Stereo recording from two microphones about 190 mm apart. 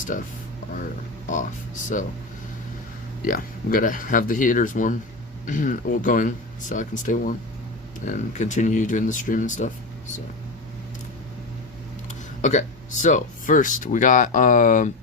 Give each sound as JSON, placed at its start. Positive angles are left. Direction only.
{"t": 1.3, "sound": "speech", "side_deg": 40}
{"t": 3.2, "sound": "speech", "side_deg": 45}
{"t": 12.0, "sound": "speech", "side_deg": 40}